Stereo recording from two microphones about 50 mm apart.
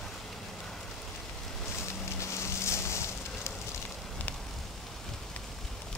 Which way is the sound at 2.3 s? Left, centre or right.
Left.